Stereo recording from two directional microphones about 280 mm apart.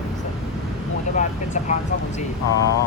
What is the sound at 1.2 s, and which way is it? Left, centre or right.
Speech, left.